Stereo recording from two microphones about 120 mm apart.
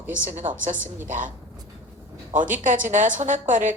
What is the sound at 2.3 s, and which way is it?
A woman's voice, 90° right.